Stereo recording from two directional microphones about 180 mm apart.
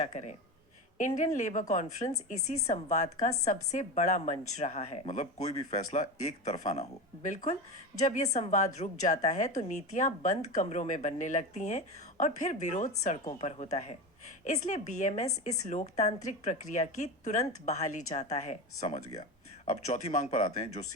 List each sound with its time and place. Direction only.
0.0 s a woman's voice: 40° left (ahead or behind)